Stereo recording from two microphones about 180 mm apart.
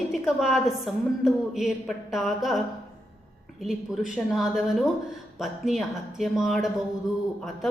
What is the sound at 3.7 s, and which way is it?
Speech, centre (ahead or behind).